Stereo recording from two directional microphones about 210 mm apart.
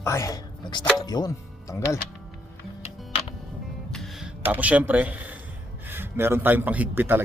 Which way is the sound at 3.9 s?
Centre (ahead or behind).